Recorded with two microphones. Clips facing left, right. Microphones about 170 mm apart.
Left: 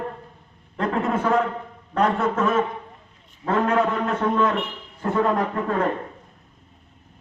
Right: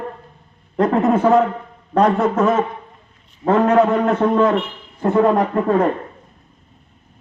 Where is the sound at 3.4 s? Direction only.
30° right (ahead or behind).